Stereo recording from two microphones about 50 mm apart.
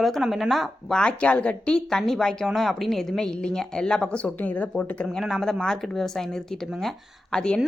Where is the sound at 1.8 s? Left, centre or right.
Centre; by 4.6 s left.